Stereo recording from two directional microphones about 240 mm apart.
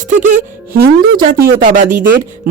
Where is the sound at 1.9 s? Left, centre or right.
Right.